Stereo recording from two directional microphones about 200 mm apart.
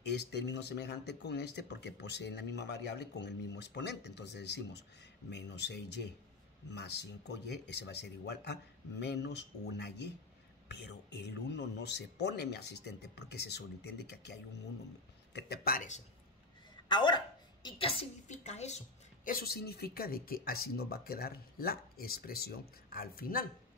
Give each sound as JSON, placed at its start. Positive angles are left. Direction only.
{"t": 0.2, "sound": "speech", "side_deg": 55}
{"t": 16.9, "sound": "a woman's voice", "side_deg": 20}
{"t": 19.2, "sound": "speech", "side_deg": 50}